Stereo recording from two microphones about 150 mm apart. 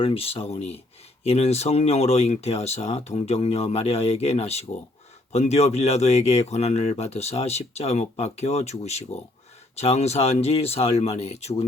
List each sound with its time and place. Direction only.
0.0 s speech: 40° left (ahead or behind)